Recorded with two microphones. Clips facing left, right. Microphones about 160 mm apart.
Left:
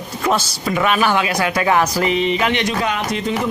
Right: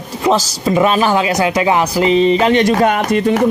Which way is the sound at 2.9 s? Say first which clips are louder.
Right 7 dB; 55° right (ahead or behind).